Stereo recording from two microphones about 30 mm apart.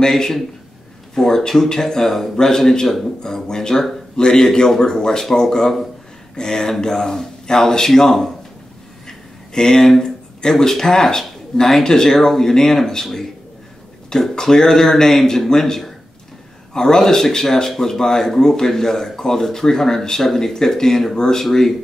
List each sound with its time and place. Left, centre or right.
1.1 s speech: centre
9.0 s a sound: left
10.0 s speech: centre